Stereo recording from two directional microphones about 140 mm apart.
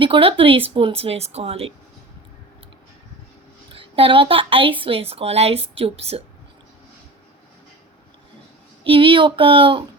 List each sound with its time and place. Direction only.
0.0 s a woman's voice: 40° right (ahead or behind)
3.8 s a woman's voice: 40° right (ahead or behind)
8.8 s a woman's voice: 40° right (ahead or behind)